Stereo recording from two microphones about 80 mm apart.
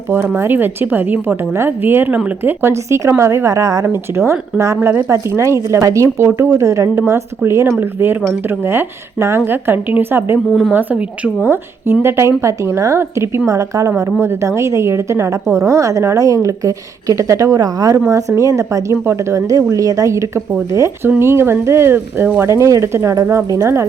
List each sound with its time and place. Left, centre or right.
0.1 s a woman's voice: right
10.7 s a woman's voice: centre
11.4 s a woman's voice: right
13.5 s a woman's voice: right